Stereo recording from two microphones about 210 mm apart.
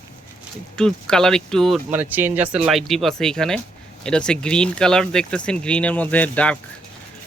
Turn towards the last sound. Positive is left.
turn(degrees=5)  # may be behind; listen again after turning